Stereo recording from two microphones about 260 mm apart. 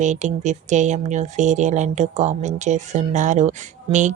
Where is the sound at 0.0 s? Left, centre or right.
Right.